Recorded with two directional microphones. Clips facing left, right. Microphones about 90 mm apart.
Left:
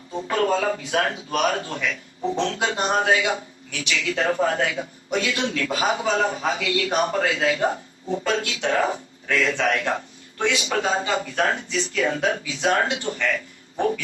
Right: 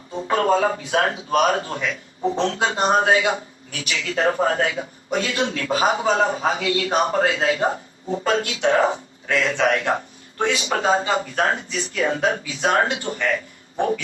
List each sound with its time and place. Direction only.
0.3 s a man's voice: 35° right (ahead or behind)